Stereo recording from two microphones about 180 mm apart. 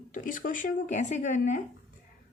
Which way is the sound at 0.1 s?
45° left (ahead or behind).